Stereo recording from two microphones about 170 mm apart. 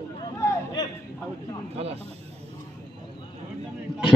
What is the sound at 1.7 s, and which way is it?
Speech, 35° right (ahead or behind).